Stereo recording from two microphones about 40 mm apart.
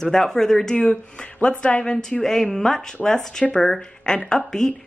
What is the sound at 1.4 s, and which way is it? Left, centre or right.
Speech, left.